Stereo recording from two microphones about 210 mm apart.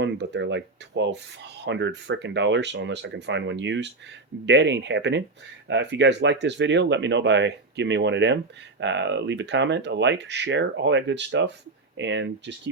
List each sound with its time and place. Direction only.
0.0 s speech: 60° right (ahead or behind)